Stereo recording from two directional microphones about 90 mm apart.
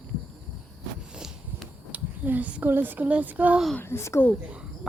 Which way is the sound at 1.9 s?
15° right (ahead or behind).